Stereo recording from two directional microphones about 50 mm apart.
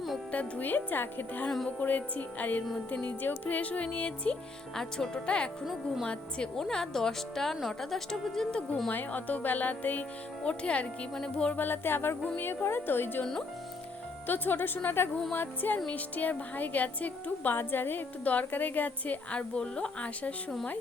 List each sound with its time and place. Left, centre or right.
0.3 s a woman's voice: left
1.5 s speech: centre
1.8 s a woman's voice: left
4.7 s speech: centre
6.6 s speech: centre
8.9 s a woman's voice: left
10.4 s speech: left
11.5 s music: left
14.3 s a woman's voice: left